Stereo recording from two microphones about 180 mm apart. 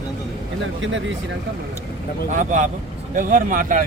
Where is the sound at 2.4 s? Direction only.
45° right (ahead or behind).